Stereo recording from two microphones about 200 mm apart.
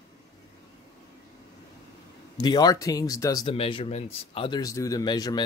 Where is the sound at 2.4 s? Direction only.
20° left (ahead or behind).